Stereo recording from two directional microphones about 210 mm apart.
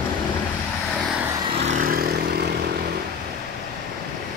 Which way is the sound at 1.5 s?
35° right (ahead or behind).